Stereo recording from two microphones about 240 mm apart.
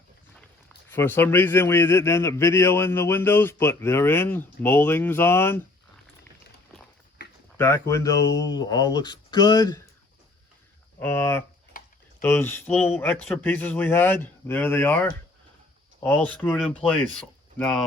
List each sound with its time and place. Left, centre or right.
0.9 s a man's voice: centre
7.5 s a man's voice: centre
11.0 s a man's voice: centre
16.0 s a man's voice: centre